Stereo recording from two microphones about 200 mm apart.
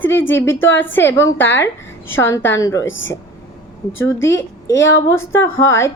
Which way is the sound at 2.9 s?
70° left (ahead or behind).